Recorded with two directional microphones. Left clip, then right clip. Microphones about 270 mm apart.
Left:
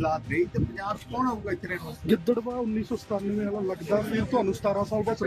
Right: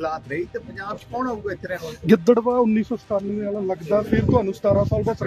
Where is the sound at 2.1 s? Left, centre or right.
Right.